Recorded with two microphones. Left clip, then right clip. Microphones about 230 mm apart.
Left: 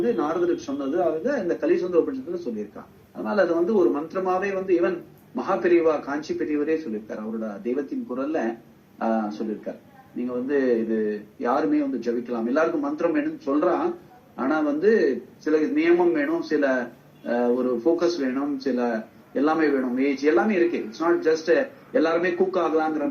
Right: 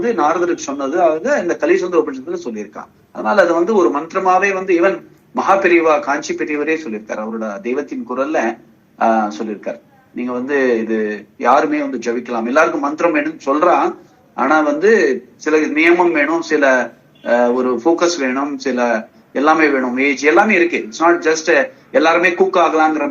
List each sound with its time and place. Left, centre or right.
0.0 s a man's voice: right